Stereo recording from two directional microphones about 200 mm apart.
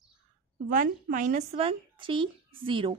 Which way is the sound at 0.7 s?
40° right (ahead or behind).